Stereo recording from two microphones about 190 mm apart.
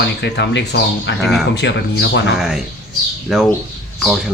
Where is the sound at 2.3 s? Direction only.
Centre (ahead or behind).